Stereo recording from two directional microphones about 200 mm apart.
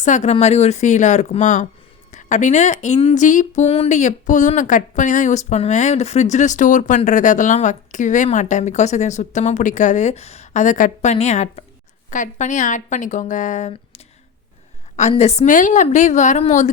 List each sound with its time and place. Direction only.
0.0 s speech: 35° left (ahead or behind)